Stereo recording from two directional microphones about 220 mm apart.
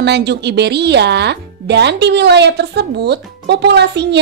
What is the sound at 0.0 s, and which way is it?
Speech, 50° right (ahead or behind).